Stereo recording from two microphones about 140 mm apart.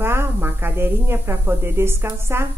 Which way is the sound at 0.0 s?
15° right (ahead or behind).